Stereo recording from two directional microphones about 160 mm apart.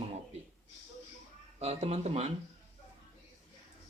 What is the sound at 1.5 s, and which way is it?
Speech, 40° right (ahead or behind).